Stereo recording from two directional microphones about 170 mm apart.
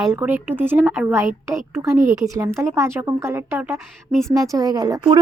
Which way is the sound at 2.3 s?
15° right (ahead or behind).